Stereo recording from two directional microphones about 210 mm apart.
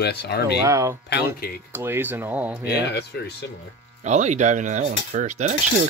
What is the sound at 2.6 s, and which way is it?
Speech, 50° left (ahead or behind).